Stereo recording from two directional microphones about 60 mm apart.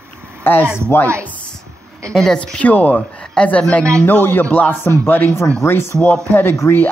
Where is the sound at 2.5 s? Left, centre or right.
Left.